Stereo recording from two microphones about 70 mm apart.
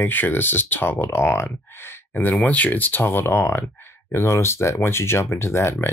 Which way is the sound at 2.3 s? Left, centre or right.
Left.